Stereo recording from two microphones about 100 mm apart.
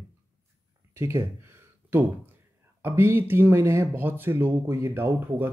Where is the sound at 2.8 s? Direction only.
25° right (ahead or behind).